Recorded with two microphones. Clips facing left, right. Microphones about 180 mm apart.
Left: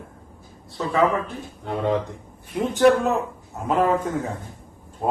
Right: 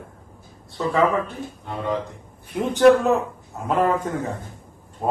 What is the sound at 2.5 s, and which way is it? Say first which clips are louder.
Speech: right 2 dB; centre (ahead or behind).